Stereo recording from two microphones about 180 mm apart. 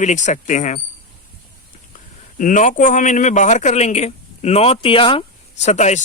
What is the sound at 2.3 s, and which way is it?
Speech, 45° left (ahead or behind).